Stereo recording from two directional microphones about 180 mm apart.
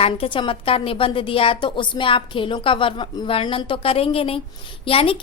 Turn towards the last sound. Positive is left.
turn(degrees=30)  # may be behind; listen again after turning